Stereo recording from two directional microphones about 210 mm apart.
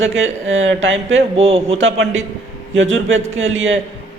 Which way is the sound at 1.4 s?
30° right (ahead or behind).